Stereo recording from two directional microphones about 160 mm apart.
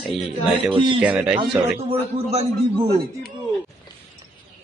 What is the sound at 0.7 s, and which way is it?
Speech, 35° right (ahead or behind).